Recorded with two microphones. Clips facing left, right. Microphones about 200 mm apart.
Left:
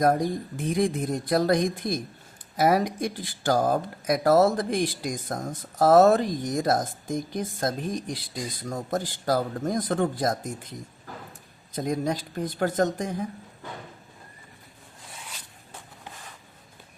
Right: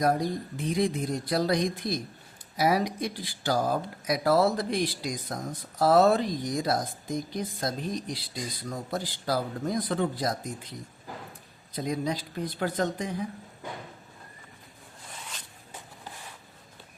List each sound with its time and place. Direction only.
0.0 s speech: 50° left (ahead or behind)